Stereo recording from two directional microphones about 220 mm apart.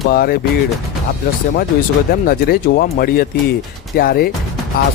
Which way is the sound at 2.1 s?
40° left (ahead or behind).